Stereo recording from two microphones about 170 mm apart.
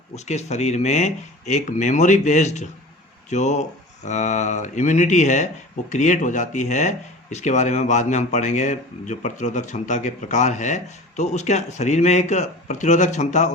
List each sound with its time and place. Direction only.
0.3 s speech: 40° left (ahead or behind)